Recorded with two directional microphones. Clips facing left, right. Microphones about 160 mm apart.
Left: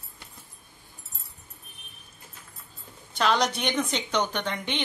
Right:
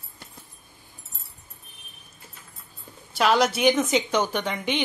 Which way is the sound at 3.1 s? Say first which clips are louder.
Right 4 dB; 5° right (ahead or behind).